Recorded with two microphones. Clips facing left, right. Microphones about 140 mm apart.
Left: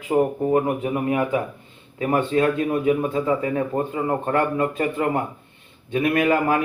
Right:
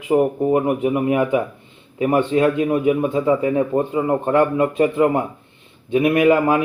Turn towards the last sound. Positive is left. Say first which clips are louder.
# right 4 dB
turn(degrees=-15)  # may be behind; listen again after turning